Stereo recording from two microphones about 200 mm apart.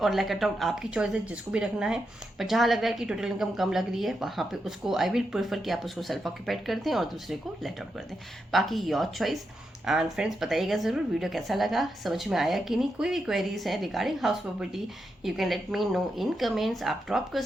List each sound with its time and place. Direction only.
0.0 s a woman's voice: centre (ahead or behind)